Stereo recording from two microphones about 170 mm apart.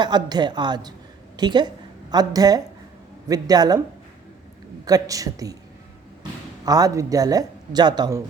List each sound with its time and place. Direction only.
0.0 s a woman's voice: 25° right (ahead or behind)
4.9 s speech: 20° right (ahead or behind)
6.7 s speech: 20° right (ahead or behind)